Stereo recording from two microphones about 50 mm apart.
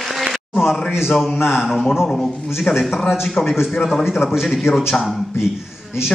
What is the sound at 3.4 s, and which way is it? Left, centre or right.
Speech, left.